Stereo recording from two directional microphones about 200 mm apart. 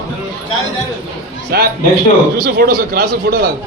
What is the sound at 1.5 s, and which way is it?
A man's voice, 50° right (ahead or behind).